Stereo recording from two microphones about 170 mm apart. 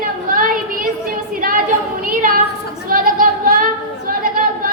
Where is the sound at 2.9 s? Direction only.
55° right (ahead or behind).